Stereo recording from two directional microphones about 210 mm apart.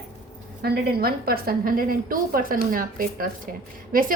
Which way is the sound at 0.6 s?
50° right (ahead or behind).